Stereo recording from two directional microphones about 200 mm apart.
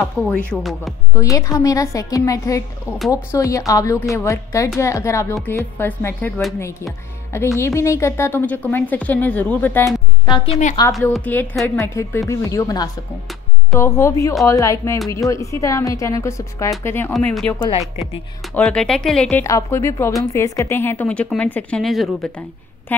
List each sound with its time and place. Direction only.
0.2 s a woman's voice: 5° left (ahead or behind)
1.1 s a woman's voice: 15° left (ahead or behind)
10.2 s a woman's voice: 20° left (ahead or behind)
11.1 s a woman's voice: 5° left (ahead or behind)